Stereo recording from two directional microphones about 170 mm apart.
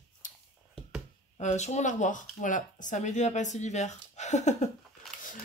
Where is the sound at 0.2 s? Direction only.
50° left (ahead or behind).